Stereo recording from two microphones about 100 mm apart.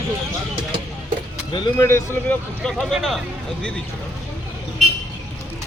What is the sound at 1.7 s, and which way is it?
Speech, 25° left (ahead or behind).